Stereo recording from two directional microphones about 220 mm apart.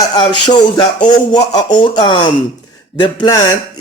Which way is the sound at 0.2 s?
20° left (ahead or behind).